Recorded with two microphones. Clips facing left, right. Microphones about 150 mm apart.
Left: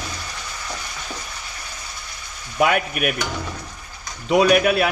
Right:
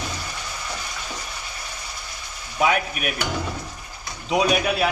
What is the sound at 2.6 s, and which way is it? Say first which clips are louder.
Speech: left 2 dB; 55° left (ahead or behind).